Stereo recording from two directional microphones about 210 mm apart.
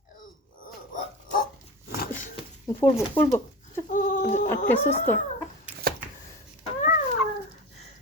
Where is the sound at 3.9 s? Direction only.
40° left (ahead or behind).